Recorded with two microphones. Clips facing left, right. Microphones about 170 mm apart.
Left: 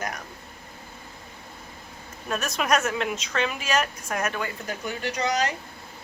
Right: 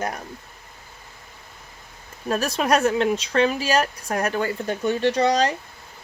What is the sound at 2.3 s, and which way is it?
Speech, 35° right (ahead or behind).